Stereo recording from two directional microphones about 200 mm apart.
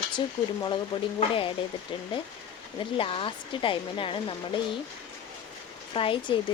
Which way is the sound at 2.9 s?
25° left (ahead or behind).